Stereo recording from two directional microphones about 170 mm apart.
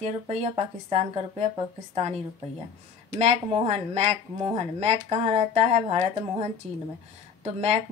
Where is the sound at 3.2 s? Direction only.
40° right (ahead or behind).